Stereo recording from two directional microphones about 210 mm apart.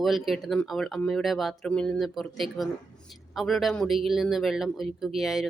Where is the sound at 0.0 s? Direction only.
Centre (ahead or behind).